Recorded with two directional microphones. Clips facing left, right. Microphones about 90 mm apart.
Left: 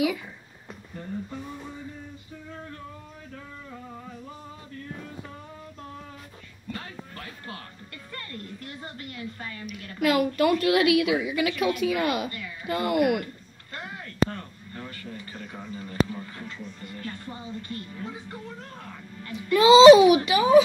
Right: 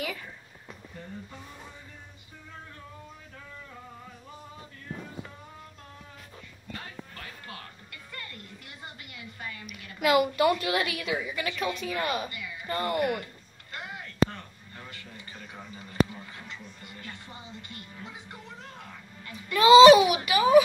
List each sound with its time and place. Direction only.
7.2 s music: 35° left (ahead or behind)
9.9 s a woman's voice: 5° right (ahead or behind)
12.3 s speech: 40° left (ahead or behind)
12.6 s speech: 10° left (ahead or behind)
13.7 s speech: 35° left (ahead or behind)
19.3 s a child's voice: 20° left (ahead or behind)